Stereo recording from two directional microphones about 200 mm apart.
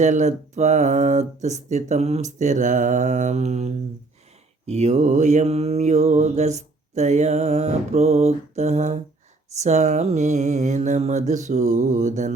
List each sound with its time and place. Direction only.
0.0 s mantra: 35° right (ahead or behind)